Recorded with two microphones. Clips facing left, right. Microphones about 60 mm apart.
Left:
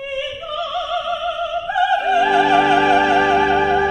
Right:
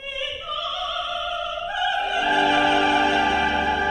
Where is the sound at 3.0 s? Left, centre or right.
Left.